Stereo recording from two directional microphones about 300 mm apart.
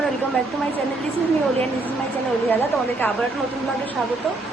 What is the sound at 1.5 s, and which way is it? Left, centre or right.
Speech, centre.